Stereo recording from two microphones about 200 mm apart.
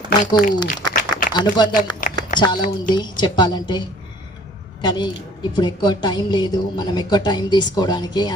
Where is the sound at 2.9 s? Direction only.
20° left (ahead or behind).